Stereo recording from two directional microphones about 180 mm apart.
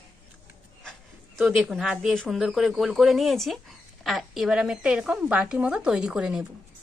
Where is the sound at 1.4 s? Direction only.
Centre (ahead or behind).